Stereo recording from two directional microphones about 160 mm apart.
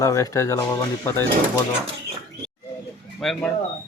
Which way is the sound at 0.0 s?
20° left (ahead or behind).